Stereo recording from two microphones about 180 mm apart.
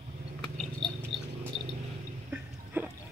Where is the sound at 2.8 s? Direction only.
10° right (ahead or behind).